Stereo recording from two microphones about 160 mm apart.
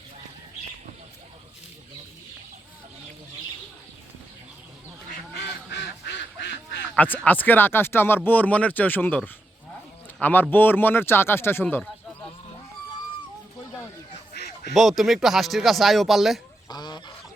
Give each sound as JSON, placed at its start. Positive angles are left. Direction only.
{"t": 5.7, "sound": "quack", "side_deg": 90}
{"t": 6.9, "sound": "speech", "side_deg": 10}
{"t": 14.3, "sound": "quack", "side_deg": 90}
{"t": 14.7, "sound": "speech", "side_deg": 0}
{"t": 16.6, "sound": "goose", "side_deg": 25}